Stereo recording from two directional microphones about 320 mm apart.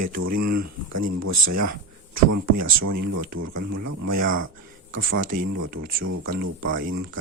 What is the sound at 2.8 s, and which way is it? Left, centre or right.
Speech, right.